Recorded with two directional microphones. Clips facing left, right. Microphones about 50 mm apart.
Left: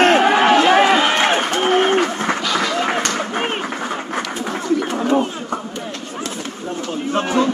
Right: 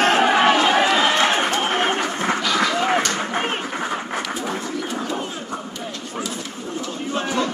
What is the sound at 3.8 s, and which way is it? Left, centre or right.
Quack, centre.